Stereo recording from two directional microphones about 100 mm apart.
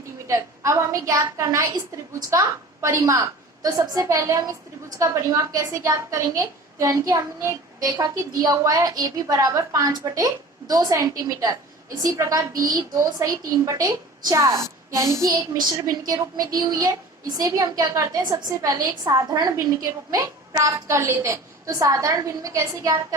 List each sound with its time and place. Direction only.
0.3 s a woman's voice: 30° right (ahead or behind)
3.6 s a woman's voice: 40° right (ahead or behind)
18.2 s a woman's voice: 45° right (ahead or behind); by 22.9 s 30° right (ahead or behind)